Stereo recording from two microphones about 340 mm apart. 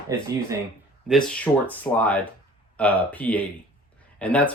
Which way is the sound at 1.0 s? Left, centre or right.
Centre.